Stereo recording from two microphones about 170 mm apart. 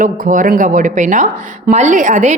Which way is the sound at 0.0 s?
50° right (ahead or behind).